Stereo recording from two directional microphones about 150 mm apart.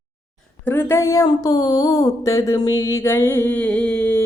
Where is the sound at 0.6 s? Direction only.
15° left (ahead or behind).